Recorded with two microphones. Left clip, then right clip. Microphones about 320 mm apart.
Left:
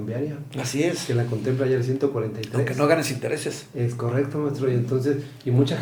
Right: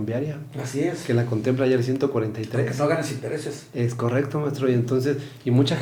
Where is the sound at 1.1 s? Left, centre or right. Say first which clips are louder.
Right 2 dB; right.